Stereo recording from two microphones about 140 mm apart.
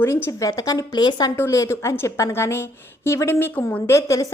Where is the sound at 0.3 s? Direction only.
25° left (ahead or behind).